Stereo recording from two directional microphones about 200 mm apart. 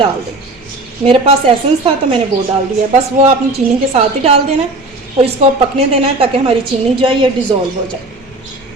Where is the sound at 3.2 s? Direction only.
30° right (ahead or behind).